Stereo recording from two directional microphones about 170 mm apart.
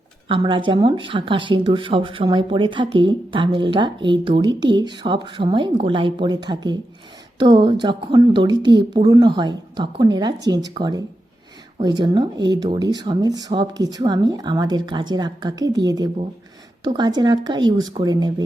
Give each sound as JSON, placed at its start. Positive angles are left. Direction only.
{"t": 0.3, "sound": "speech", "side_deg": -30}